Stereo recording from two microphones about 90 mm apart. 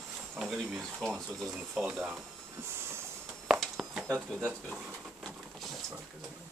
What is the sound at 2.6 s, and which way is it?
Train, 25° right (ahead or behind).